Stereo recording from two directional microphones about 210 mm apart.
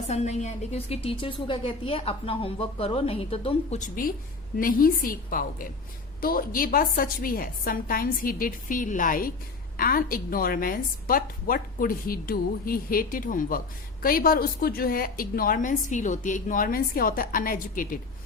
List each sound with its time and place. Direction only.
0.1 s a woman's voice: 30° left (ahead or behind)